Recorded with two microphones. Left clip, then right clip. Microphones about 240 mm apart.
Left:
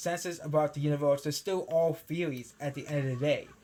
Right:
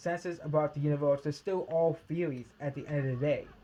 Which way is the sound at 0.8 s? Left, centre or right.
Centre.